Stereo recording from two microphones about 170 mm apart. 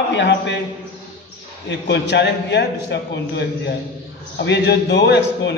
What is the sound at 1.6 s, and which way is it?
A man's voice, 90° left.